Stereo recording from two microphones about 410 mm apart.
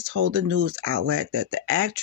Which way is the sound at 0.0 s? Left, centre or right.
Right.